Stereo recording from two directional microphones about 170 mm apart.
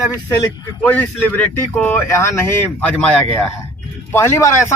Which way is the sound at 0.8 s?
10° left (ahead or behind).